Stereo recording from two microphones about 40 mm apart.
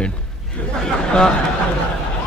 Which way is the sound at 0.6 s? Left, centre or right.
Left.